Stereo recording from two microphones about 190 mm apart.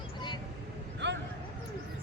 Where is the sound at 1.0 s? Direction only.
65° right (ahead or behind).